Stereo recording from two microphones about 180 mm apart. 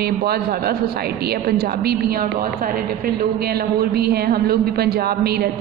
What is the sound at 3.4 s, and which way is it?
A man's voice, 60° right (ahead or behind).